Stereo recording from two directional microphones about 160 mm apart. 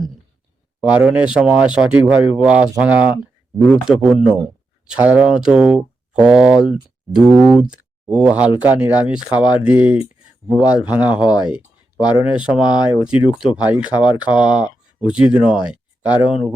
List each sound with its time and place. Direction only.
0.9 s speech: 5° right (ahead or behind)
11.4 s a sound: 5° right (ahead or behind)
12.2 s speech: 30° left (ahead or behind)
12.5 s speech: 5° right (ahead or behind)